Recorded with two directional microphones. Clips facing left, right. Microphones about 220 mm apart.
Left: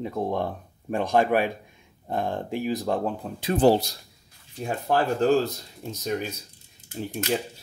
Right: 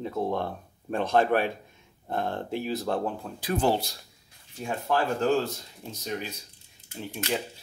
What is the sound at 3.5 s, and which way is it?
Speech, 35° left (ahead or behind).